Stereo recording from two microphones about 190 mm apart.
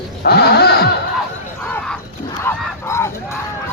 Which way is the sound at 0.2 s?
55° left (ahead or behind).